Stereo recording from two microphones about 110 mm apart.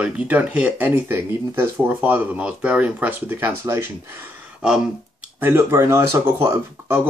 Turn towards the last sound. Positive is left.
turn(degrees=-25)  # may be behind; listen again after turning